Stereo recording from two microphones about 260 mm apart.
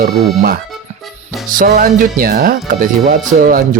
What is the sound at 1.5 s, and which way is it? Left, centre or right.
Speech, right.